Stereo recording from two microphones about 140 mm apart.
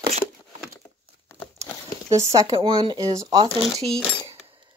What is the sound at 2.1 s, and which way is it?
Speech, 25° right (ahead or behind).